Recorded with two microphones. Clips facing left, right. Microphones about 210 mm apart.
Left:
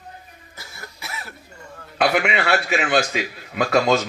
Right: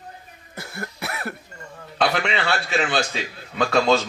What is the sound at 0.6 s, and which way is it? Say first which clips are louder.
Cough: right 8 dB; 60° right (ahead or behind).